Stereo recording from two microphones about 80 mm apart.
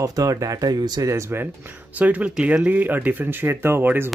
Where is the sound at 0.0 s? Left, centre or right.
Right.